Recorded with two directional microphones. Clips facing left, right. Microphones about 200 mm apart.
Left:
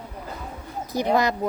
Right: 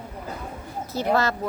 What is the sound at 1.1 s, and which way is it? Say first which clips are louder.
Speech: left 1 dB; 15° left (ahead or behind).